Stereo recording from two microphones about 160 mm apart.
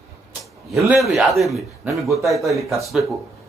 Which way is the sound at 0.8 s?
Centre (ahead or behind).